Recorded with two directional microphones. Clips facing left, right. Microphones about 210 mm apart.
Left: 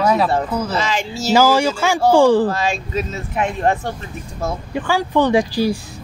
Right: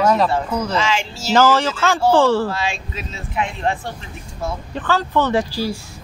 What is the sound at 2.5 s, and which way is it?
Speech, 40° left (ahead or behind).